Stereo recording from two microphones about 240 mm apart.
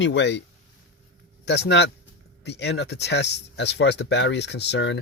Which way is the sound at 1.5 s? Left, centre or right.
Left.